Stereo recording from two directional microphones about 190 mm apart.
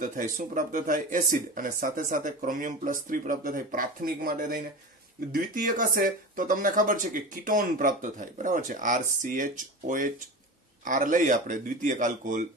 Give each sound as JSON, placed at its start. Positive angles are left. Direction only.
{"t": 0.0, "sound": "speech", "side_deg": -45}